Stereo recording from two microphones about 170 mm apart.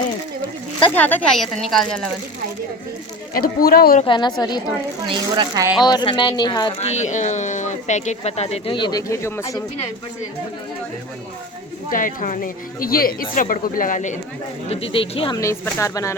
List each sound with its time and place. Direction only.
0.9 s speech: 10° left (ahead or behind)
3.3 s a woman's voice: 60° left (ahead or behind)
4.0 s speech: 25° left (ahead or behind)
5.0 s speech: 25° right (ahead or behind)
5.8 s speech: 25° left (ahead or behind)
6.7 s speech: 40° left (ahead or behind); by 9.6 s 20° left (ahead or behind)
11.9 s a woman's voice: 55° left (ahead or behind)
14.7 s speech: 35° left (ahead or behind)
15.4 s speech: 15° left (ahead or behind)